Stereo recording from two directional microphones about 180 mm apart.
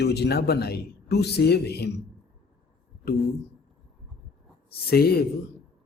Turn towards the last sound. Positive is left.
turn(degrees=60)  # may be behind; listen again after turning